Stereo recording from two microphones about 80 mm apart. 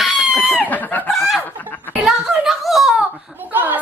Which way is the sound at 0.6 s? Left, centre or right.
Left.